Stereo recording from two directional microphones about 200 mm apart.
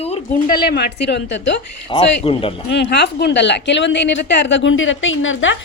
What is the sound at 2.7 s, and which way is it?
A woman's voice, 60° left (ahead or behind).